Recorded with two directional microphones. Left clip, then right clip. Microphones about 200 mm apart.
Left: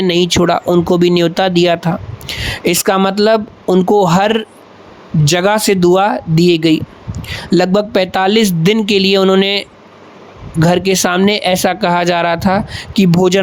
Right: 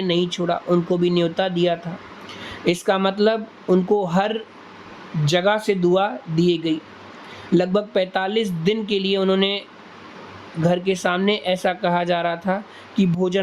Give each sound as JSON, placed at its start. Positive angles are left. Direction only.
{"t": 0.1, "sound": "speech", "side_deg": 45}